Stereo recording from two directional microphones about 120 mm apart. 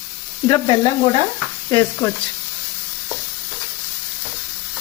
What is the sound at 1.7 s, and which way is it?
Speech, 20° left (ahead or behind).